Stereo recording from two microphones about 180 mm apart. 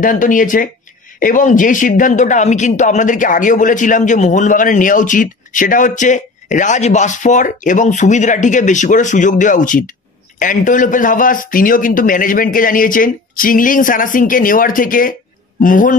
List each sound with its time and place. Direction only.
0.0 s speech: 45° left (ahead or behind)